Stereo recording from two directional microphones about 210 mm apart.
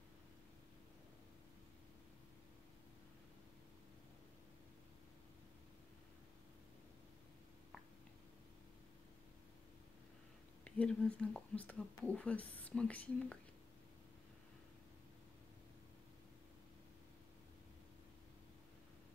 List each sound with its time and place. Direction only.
10.6 s speech: 5° left (ahead or behind)